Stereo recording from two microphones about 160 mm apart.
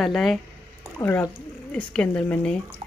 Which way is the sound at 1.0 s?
20° left (ahead or behind).